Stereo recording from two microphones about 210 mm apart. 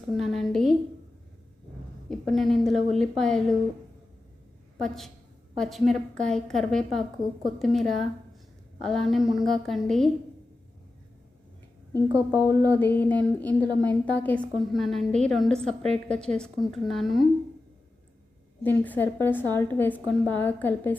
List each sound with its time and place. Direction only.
0.2 s a sound: centre (ahead or behind)
2.0 s a woman's voice: centre (ahead or behind)
4.8 s a woman's voice: centre (ahead or behind)
12.0 s a woman's voice: 15° right (ahead or behind)
12.7 s a woman's voice: 10° left (ahead or behind)
18.6 s a woman's voice: 10° left (ahead or behind)